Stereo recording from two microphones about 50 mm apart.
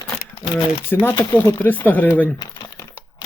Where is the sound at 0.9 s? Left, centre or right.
Left.